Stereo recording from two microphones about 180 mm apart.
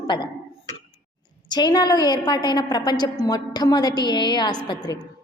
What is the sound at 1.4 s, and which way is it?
A woman's voice, 25° left (ahead or behind).